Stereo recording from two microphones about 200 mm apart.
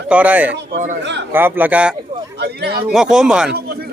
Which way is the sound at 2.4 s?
55° right (ahead or behind).